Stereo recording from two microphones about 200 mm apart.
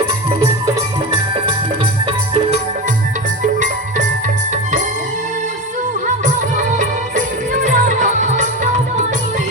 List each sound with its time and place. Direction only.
3.4 s music: 40° right (ahead or behind)
6.1 s music: 40° right (ahead or behind)